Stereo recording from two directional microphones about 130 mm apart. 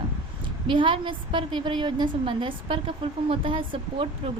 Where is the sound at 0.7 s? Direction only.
40° right (ahead or behind).